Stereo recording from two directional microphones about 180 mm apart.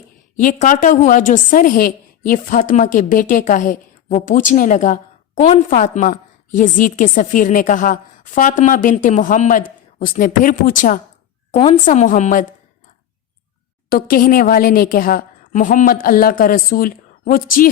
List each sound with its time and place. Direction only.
0.3 s a woman's voice: 50° left (ahead or behind)
11.5 s a woman's voice: 35° left (ahead or behind)
11.9 s a woman's voice: 45° left (ahead or behind)
13.9 s a woman's voice: 55° left (ahead or behind)